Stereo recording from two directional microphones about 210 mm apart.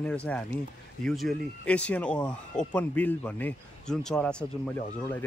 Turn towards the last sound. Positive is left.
turn(degrees=10)  # may be behind; listen again after turning